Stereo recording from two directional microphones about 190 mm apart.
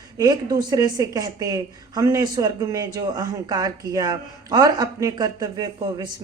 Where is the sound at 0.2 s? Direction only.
20° right (ahead or behind).